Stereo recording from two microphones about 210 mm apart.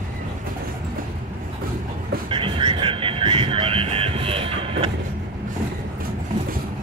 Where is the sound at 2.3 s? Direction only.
25° right (ahead or behind).